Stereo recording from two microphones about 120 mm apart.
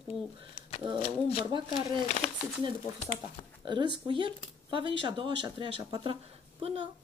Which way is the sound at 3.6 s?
40° right (ahead or behind).